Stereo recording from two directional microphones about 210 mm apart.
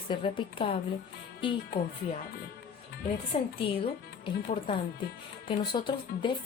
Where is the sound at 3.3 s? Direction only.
30° left (ahead or behind).